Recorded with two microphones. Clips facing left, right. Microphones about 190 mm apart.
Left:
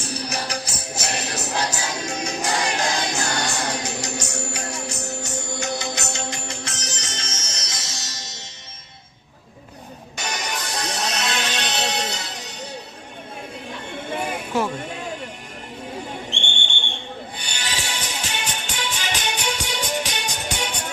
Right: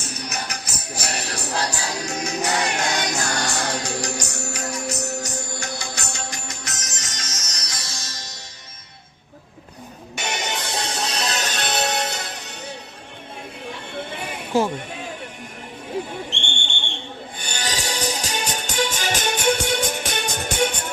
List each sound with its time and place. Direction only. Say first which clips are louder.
0.0 s music: left 3 dB; 30° left (ahead or behind)
10.2 s music: right 2 dB; 25° right (ahead or behind); by 12.5 s 55° right (ahead or behind)
14.5 s speech: right 4 dB; 25° right (ahead or behind)
17.4 s music: right 7 dB; 45° right (ahead or behind)